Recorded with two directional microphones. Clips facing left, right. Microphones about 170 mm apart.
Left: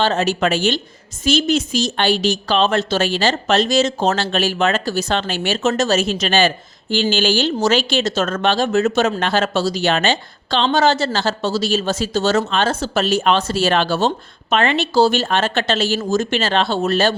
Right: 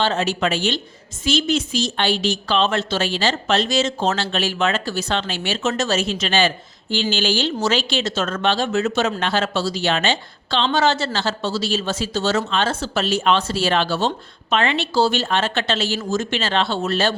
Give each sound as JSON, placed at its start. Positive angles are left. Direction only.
{"t": 0.0, "sound": "speech", "side_deg": 45}